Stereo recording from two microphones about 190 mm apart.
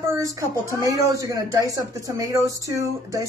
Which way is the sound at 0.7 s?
15° right (ahead or behind).